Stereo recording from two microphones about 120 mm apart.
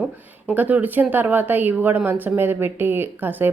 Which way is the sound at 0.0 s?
15° right (ahead or behind).